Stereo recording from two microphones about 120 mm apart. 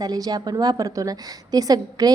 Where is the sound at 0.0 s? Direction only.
30° right (ahead or behind).